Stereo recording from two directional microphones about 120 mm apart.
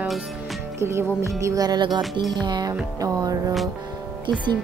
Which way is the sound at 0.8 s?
20° right (ahead or behind).